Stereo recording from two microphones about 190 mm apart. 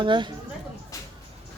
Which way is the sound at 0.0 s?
25° right (ahead or behind).